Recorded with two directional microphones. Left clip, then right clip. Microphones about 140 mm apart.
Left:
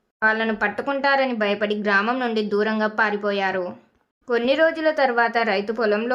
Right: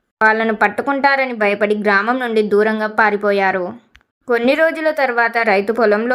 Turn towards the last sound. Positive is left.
turn(degrees=-30)  # may be behind; listen again after turning